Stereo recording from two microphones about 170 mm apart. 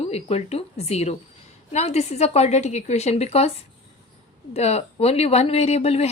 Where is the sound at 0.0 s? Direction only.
35° left (ahead or behind).